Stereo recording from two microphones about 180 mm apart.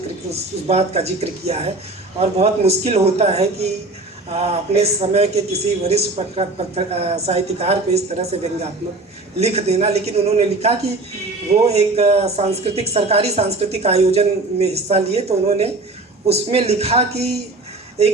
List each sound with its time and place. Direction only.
0.3 s speech: 35° right (ahead or behind)
9.4 s speech: 35° right (ahead or behind)